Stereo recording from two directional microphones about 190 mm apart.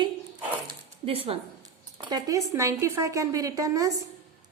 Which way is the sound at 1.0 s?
30° right (ahead or behind).